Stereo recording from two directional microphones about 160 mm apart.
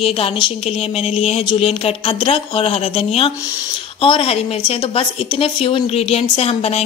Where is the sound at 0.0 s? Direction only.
35° left (ahead or behind).